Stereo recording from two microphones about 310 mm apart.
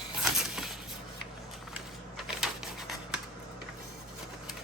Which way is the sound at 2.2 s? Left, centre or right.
Centre.